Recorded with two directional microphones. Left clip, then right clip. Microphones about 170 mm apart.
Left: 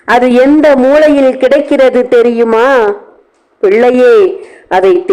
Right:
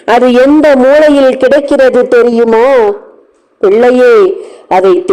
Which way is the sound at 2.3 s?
Centre (ahead or behind).